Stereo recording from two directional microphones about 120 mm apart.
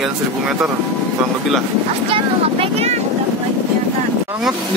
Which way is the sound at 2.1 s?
55° right (ahead or behind).